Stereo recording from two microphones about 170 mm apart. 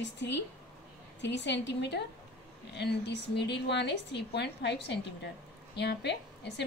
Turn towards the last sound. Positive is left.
turn(degrees=85)